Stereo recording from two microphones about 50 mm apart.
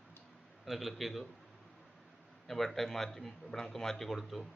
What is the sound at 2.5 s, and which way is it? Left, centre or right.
Speech, centre.